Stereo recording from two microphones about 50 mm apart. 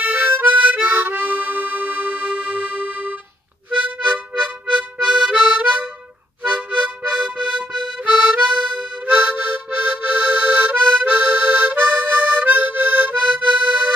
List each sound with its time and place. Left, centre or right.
0.0 s harmonica: right; by 5.6 s centre
5.6 s harmonica: right
6.4 s music: right
9.0 s harmonica: right